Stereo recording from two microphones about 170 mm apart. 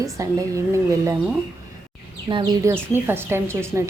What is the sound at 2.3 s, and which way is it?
Speech, 30° right (ahead or behind).